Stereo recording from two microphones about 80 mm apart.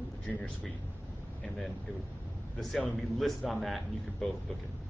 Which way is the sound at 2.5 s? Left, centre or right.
Centre.